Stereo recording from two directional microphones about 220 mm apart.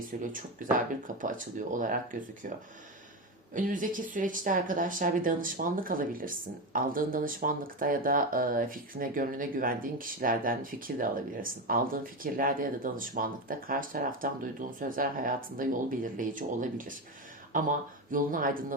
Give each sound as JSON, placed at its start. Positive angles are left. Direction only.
{"t": 0.1, "sound": "speech", "side_deg": -40}
{"t": 3.5, "sound": "speech", "side_deg": -35}